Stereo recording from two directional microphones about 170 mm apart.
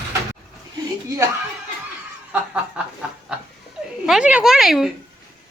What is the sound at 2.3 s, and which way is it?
Speech, 10° right (ahead or behind).